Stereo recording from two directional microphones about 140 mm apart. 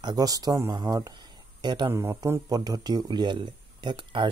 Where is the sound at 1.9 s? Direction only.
20° right (ahead or behind).